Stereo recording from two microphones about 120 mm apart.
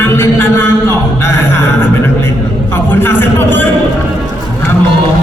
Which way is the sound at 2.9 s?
15° left (ahead or behind).